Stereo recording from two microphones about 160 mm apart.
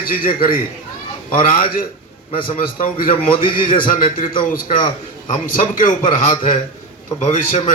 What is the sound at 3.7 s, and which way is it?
A man's voice, 60° left (ahead or behind).